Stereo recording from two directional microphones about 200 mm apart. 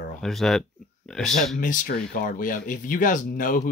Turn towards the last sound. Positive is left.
turn(degrees=40)  # may be behind; listen again after turning